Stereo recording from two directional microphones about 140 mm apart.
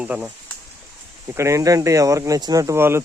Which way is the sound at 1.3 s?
20° right (ahead or behind).